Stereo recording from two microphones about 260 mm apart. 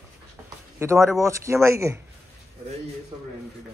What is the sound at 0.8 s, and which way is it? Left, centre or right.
Speech, centre.